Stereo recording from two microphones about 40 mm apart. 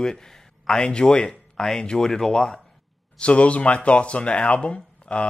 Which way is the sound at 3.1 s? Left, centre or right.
Left.